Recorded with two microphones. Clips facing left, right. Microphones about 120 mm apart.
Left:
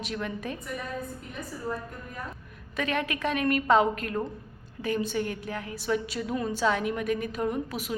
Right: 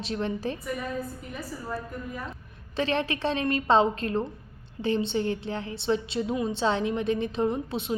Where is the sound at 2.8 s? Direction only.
30° right (ahead or behind).